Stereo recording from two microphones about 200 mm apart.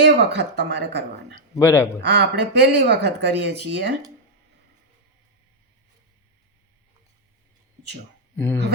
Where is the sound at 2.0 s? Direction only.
60° right (ahead or behind).